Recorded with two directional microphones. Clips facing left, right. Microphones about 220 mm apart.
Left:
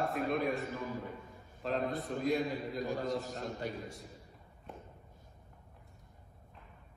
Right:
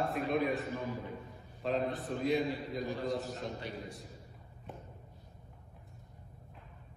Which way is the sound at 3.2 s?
45° left (ahead or behind).